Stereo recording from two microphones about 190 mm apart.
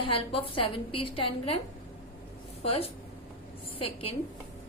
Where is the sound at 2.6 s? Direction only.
30° left (ahead or behind).